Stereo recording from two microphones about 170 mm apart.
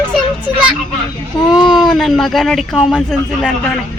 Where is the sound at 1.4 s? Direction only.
Centre (ahead or behind).